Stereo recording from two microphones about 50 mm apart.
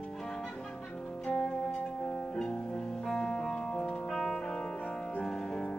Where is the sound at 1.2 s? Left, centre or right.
Centre.